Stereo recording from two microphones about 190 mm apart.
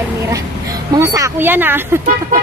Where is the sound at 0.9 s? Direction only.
20° right (ahead or behind).